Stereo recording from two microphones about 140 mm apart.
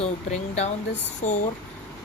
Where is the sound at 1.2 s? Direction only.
60° left (ahead or behind).